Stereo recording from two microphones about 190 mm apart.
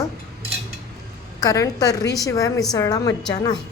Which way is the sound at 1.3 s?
20° left (ahead or behind).